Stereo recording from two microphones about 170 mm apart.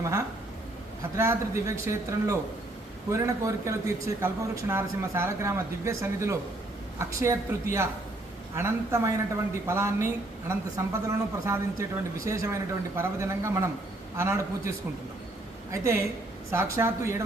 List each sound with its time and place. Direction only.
0.0 s speech: 20° right (ahead or behind)
15.7 s speech: 15° right (ahead or behind)